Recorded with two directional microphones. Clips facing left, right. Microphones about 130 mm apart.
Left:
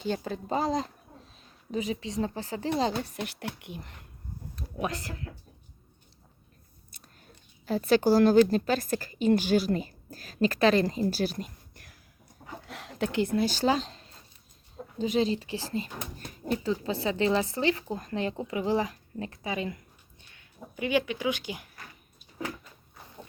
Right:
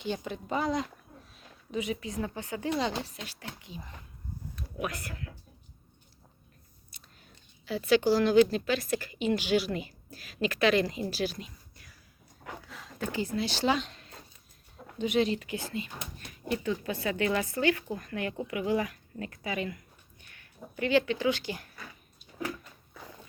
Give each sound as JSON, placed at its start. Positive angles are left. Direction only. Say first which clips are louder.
{"t": 0.0, "sound": "speech", "louder": "left 3 dB", "side_deg": 45}
{"t": 2.9, "sound": "speech", "louder": "left 4 dB", "side_deg": 55}
{"t": 4.5, "sound": "speech", "louder": "left 3 dB", "side_deg": 30}
{"t": 7.6, "sound": "a woman's voice", "louder": "left 2 dB", "side_deg": 45}
{"t": 12.6, "sound": "a sound", "louder": "left 6 dB", "side_deg": 70}
{"t": 13.4, "sound": "speech", "louder": "left 3 dB", "side_deg": 45}
{"t": 16.6, "sound": "speech", "louder": "left 3 dB", "side_deg": 30}